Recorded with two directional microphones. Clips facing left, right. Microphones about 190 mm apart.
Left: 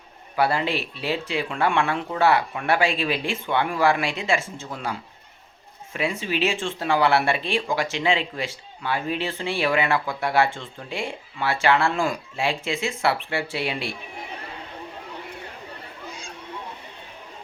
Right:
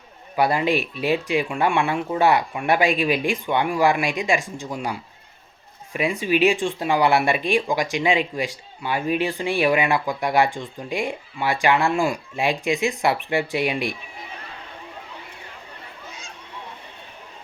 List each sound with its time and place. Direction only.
0.3 s speech: 15° right (ahead or behind)